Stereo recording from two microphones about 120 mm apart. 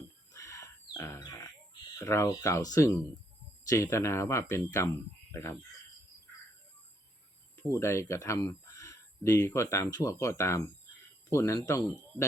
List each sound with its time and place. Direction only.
0.3 s chicken: 25° left (ahead or behind)
1.2 s a sound: 25° left (ahead or behind)
2.0 s speech: 25° left (ahead or behind)
7.7 s speech: 25° left (ahead or behind)